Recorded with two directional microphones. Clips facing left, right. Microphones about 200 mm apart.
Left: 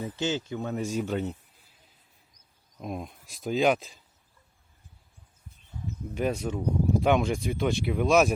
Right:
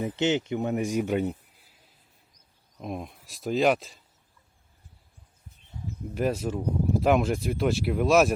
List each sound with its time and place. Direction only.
0.0 s speech: 20° right (ahead or behind)
2.7 s speech: centre (ahead or behind)
6.1 s speech: centre (ahead or behind)